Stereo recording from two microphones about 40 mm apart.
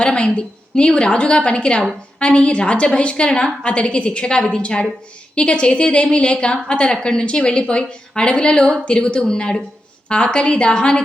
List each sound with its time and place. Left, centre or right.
0.0 s a woman's voice: left